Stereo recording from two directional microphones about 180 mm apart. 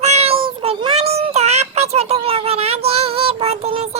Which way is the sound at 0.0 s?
35° right (ahead or behind).